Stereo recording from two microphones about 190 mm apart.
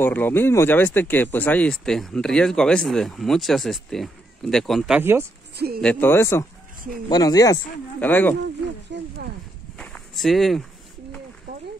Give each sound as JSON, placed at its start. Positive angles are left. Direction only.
{"t": 0.0, "sound": "speech", "side_deg": 10}
{"t": 5.8, "sound": "speech", "side_deg": 5}
{"t": 8.9, "sound": "horse", "side_deg": -70}
{"t": 9.8, "sound": "a sound", "side_deg": 5}